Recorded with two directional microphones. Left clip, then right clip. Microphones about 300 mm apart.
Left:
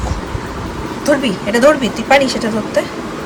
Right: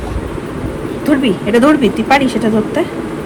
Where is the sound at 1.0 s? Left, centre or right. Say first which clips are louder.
Even; centre.